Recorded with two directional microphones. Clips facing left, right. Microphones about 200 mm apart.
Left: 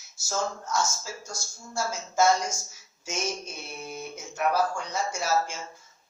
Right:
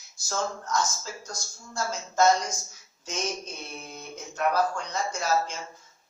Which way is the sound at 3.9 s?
5° left (ahead or behind).